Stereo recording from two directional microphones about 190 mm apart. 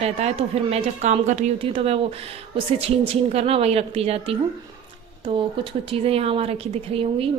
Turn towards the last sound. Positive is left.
turn(degrees=-30)  # may be behind; listen again after turning